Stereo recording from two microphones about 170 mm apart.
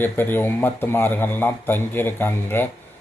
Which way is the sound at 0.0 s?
10° left (ahead or behind).